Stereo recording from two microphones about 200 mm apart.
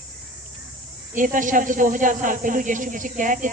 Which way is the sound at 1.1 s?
40° right (ahead or behind).